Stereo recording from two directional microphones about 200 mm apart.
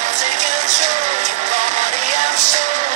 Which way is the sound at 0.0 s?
35° right (ahead or behind).